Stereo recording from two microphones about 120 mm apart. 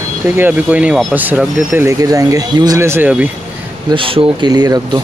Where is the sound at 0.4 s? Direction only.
15° right (ahead or behind); by 2.8 s 35° right (ahead or behind).